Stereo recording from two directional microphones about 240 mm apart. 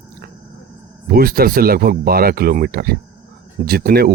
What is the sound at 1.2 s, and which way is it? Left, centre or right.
Speech, right.